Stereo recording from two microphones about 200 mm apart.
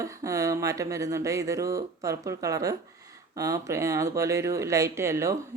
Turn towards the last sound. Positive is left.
turn(degrees=-15)  # may be behind; listen again after turning